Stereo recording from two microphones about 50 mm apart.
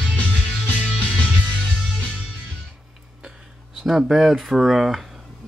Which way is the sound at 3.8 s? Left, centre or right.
Centre.